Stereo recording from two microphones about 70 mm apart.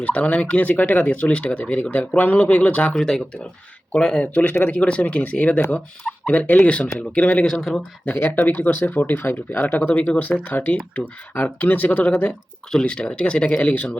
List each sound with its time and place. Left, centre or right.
0.0 s speech: left
1.8 s speech: left
2.9 s speech: centre
7.4 s speech: centre
8.0 s speech: left